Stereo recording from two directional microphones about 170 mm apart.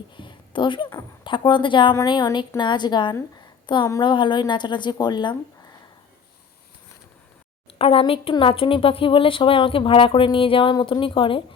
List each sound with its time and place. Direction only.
0.2 s a sound: 30° left (ahead or behind)
1.2 s a woman's voice: 30° left (ahead or behind)
7.8 s speech: 35° left (ahead or behind)